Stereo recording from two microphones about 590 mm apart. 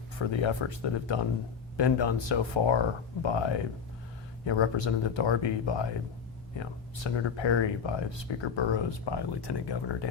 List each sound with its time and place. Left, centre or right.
0.2 s speech: left